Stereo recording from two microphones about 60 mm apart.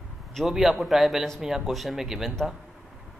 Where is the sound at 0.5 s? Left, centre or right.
Centre.